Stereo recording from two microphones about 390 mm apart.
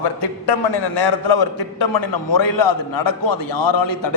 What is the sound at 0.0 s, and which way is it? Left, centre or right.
A man's voice, left.